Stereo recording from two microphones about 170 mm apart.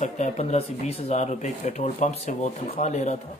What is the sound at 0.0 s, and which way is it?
Speech, 40° left (ahead or behind).